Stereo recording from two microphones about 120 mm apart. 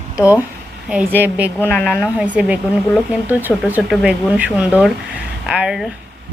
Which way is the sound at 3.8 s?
5° right (ahead or behind).